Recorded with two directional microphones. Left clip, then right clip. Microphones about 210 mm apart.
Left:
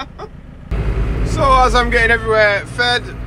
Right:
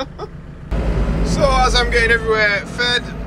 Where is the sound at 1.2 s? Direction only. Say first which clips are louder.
Left 3 dB; 5° left (ahead or behind).